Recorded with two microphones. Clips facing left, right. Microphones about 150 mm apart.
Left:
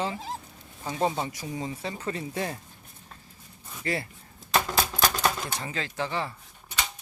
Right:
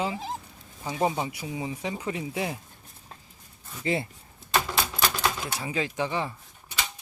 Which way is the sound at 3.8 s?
20° right (ahead or behind).